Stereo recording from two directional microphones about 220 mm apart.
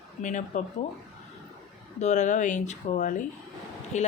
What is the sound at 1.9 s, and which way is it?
Speech, 30° left (ahead or behind).